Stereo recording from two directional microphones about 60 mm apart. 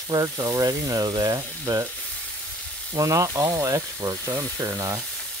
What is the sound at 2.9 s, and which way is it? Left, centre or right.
Speech, right.